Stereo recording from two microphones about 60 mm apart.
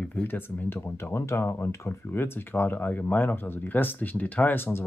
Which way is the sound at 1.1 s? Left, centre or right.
Left.